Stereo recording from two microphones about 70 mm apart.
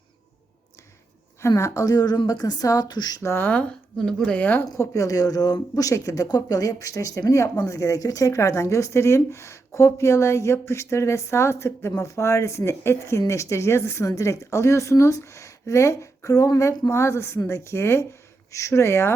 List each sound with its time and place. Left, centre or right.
1.4 s a woman's voice: left
3.2 s a woman's voice: left
3.5 s speech: centre
4.8 s a woman's voice: left
6.2 s a woman's voice: left